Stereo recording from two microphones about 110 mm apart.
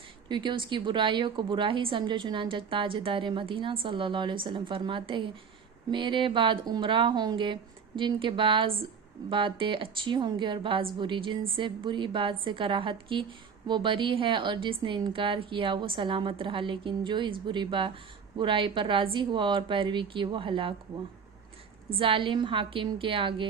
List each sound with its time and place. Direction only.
0.3 s a woman's voice: 45° right (ahead or behind)
21.9 s a woman's voice: 55° right (ahead or behind)